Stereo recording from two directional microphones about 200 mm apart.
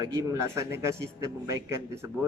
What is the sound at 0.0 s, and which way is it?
A man's voice, 15° right (ahead or behind).